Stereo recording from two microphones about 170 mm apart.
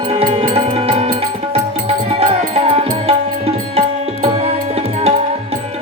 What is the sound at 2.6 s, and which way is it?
Music, 35° right (ahead or behind).